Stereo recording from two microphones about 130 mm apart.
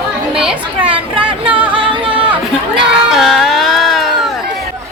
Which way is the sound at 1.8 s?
40° right (ahead or behind).